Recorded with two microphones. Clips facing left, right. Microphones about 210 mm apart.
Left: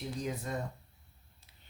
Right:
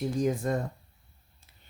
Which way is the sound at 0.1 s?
45° right (ahead or behind).